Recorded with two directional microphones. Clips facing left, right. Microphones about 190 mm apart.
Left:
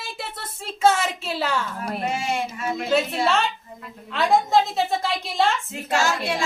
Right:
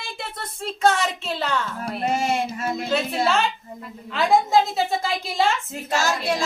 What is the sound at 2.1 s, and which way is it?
Child singing, 40° right (ahead or behind).